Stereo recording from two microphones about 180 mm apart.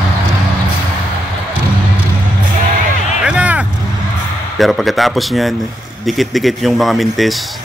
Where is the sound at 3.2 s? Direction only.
5° right (ahead or behind).